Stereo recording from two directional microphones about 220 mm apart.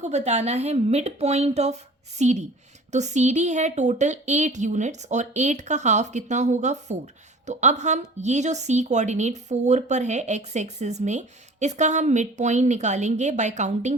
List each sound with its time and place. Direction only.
0.0 s a woman's voice: 30° right (ahead or behind)